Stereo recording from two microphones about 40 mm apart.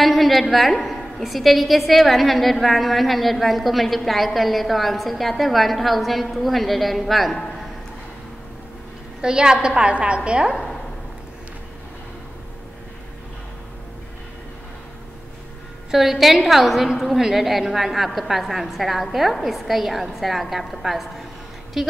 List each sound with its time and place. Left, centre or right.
0.0 s a woman's voice: centre
9.2 s a woman's voice: centre
15.9 s a woman's voice: centre